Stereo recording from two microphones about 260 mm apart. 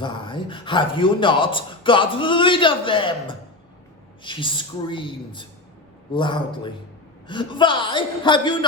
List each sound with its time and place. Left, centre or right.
0.0 s a man's voice: centre